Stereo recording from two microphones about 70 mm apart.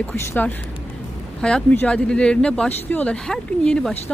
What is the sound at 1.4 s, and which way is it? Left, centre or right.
Speech, centre.